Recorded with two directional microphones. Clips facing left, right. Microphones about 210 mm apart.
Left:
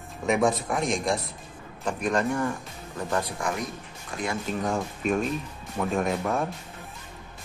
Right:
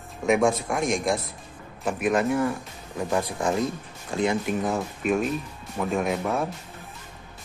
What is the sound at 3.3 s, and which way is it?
Speech, 25° right (ahead or behind).